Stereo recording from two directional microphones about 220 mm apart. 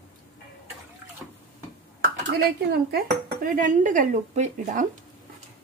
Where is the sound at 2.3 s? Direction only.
45° right (ahead or behind).